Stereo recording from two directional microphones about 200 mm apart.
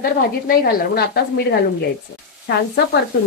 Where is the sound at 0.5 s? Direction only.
50° left (ahead or behind).